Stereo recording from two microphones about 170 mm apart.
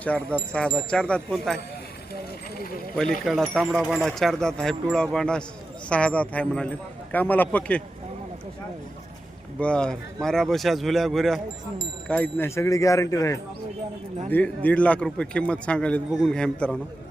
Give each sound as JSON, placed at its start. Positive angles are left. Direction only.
{"t": 0.0, "sound": "a man's voice", "side_deg": 10}
{"t": 2.9, "sound": "a man's voice", "side_deg": 5}
{"t": 9.6, "sound": "a man's voice", "side_deg": 5}